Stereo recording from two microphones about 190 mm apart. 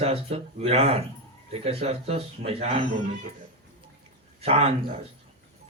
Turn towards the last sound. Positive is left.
turn(degrees=-30)  # may be behind; listen again after turning